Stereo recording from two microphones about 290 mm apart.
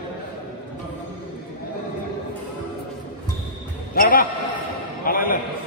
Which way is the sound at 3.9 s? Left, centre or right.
Left.